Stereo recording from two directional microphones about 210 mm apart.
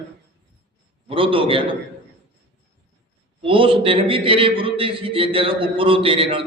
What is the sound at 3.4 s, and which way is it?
A man's voice, 25° right (ahead or behind).